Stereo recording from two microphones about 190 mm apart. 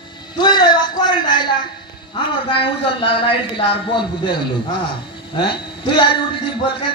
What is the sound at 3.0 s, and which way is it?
A man's voice, 25° left (ahead or behind).